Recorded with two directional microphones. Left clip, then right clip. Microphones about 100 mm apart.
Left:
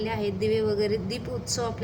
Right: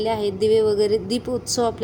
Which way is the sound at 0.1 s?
35° right (ahead or behind).